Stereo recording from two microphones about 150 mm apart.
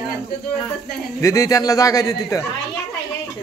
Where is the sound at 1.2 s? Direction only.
20° left (ahead or behind).